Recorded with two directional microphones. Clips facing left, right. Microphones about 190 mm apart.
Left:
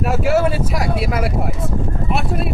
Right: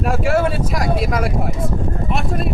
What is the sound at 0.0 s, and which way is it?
Speech, 5° left (ahead or behind).